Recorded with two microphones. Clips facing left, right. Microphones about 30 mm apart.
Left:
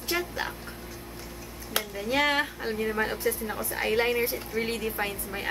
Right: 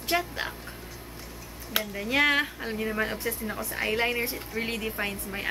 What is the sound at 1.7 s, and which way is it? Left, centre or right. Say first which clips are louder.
Speech: right 1 dB; centre.